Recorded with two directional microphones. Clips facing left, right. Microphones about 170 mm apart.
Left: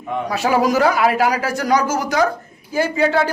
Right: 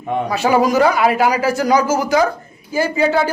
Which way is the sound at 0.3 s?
Centre (ahead or behind).